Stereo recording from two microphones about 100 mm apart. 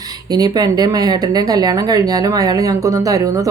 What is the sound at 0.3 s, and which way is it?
Speech, 40° right (ahead or behind).